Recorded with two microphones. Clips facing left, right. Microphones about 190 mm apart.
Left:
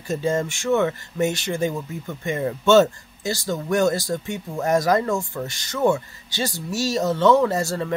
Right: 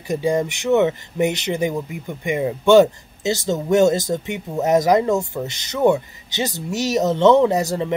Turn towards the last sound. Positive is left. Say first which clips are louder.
# right 4 dB
turn(degrees=-15)  # may be behind; listen again after turning